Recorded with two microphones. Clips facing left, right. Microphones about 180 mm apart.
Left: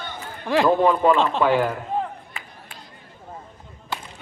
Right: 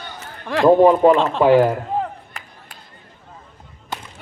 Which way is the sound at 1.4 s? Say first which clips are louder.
Right 10 dB; 40° right (ahead or behind).